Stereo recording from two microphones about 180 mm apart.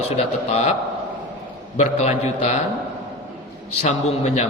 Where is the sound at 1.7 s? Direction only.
40° left (ahead or behind).